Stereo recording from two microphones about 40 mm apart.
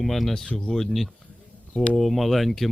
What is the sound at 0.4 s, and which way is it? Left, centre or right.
Speech, left.